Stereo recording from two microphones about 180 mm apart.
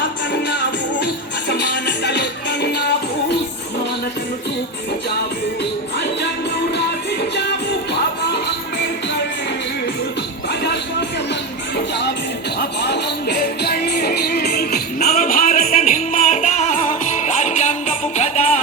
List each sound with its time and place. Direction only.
0.9 s music: 75° left (ahead or behind)
6.7 s music: 70° left (ahead or behind)
12.5 s music: 65° left (ahead or behind); by 18.4 s 40° left (ahead or behind)